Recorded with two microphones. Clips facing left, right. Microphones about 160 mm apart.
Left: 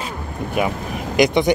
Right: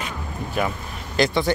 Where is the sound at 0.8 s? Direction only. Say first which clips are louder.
Left 9 dB; 90° left.